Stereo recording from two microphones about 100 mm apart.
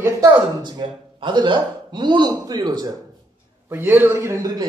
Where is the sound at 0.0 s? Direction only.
30° right (ahead or behind).